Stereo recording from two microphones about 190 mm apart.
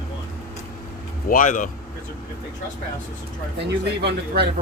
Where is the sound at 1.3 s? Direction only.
45° left (ahead or behind).